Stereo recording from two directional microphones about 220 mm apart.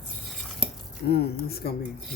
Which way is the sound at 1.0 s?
45° left (ahead or behind).